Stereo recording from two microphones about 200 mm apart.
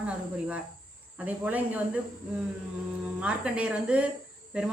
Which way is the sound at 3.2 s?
5° right (ahead or behind).